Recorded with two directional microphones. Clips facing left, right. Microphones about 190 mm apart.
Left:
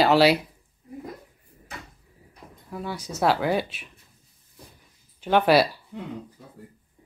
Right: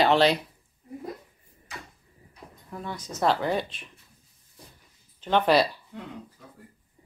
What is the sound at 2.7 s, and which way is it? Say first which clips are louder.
Speech: left 3 dB; 5° left (ahead or behind).